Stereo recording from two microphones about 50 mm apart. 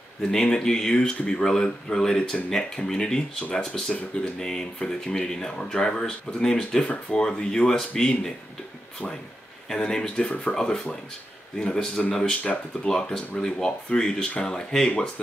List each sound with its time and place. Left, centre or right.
0.3 s speech: centre
9.7 s speech: centre